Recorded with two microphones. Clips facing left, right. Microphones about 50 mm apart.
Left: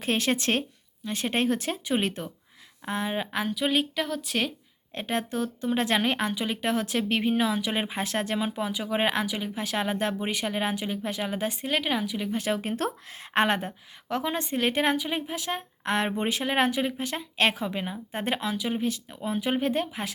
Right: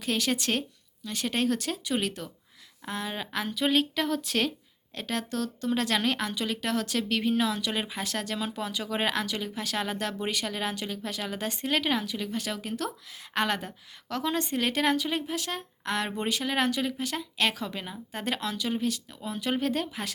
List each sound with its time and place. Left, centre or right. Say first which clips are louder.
0.0 s speech: left 3 dB; left
3.4 s speech: right 2 dB; centre
4.9 s speech: left 3 dB; left